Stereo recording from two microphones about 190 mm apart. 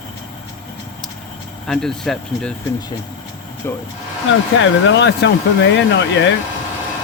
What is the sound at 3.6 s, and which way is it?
Speech, 15° left (ahead or behind).